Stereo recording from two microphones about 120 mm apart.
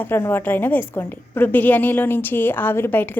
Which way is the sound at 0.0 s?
20° left (ahead or behind).